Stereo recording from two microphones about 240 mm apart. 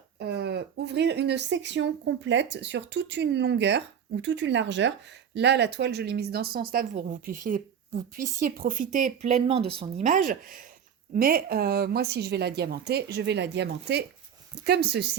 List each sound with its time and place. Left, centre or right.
0.2 s speech: right